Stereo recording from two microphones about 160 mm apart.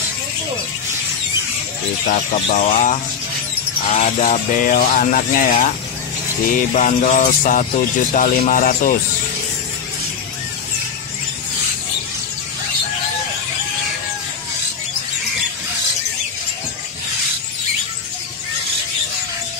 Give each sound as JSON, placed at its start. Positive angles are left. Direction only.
{"t": 2.0, "sound": "music", "side_deg": 45}
{"t": 3.9, "sound": "speech", "side_deg": 50}
{"t": 6.5, "sound": "music", "side_deg": 50}
{"t": 8.1, "sound": "speech", "side_deg": 55}